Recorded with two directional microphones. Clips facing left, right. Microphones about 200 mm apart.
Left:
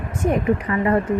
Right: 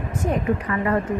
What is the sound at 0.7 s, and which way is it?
Speech, 25° left (ahead or behind).